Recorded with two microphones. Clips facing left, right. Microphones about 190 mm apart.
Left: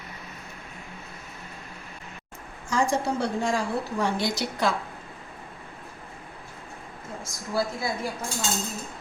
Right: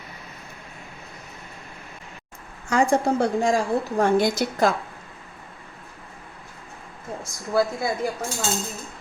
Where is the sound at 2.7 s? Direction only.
60° right (ahead or behind).